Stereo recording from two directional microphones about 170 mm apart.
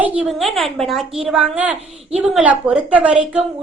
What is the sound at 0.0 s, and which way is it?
A child's voice, 5° right (ahead or behind).